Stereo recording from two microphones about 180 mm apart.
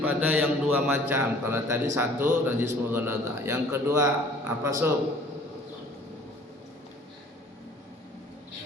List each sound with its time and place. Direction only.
0.0 s a man's voice: 10° right (ahead or behind)